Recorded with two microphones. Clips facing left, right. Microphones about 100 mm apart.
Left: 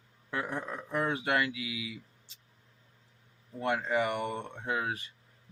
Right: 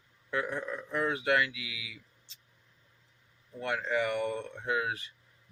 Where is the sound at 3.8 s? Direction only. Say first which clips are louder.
Even; 20° left (ahead or behind).